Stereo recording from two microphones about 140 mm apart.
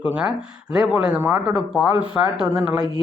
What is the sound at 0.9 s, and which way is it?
Speech, 15° right (ahead or behind).